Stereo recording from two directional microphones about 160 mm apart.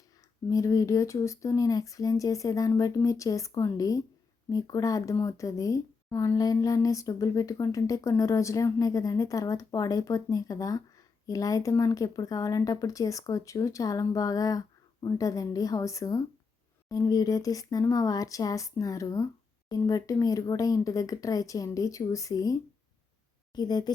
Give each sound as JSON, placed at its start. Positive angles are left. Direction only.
{"t": 0.5, "sound": "speech", "side_deg": 20}
{"t": 23.6, "sound": "speech", "side_deg": 25}